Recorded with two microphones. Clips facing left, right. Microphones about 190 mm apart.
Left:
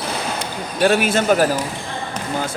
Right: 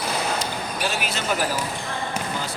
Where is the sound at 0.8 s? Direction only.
55° left (ahead or behind).